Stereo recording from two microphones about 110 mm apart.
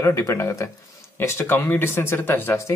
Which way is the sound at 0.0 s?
30° left (ahead or behind).